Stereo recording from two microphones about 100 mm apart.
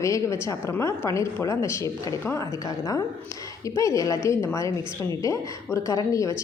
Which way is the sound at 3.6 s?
30° left (ahead or behind).